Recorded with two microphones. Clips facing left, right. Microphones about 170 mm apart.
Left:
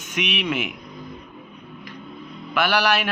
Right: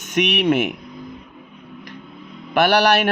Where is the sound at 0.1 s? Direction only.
45° right (ahead or behind).